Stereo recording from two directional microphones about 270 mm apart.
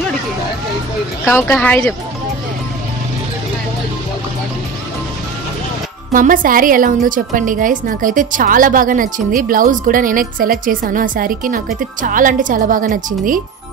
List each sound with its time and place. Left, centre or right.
1.2 s speech: centre
6.1 s a woman's voice: right